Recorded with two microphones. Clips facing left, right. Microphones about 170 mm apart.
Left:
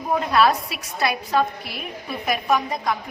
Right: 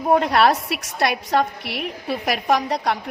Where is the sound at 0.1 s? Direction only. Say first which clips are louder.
Right 3 dB; 65° right (ahead or behind).